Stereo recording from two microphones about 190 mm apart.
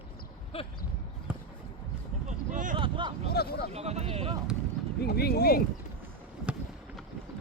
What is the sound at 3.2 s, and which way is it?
Hubbub, 55° left (ahead or behind).